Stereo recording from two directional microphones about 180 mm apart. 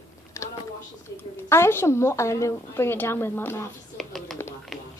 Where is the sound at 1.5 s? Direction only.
15° left (ahead or behind).